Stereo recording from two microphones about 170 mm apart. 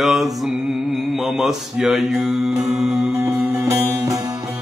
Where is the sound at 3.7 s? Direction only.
20° right (ahead or behind).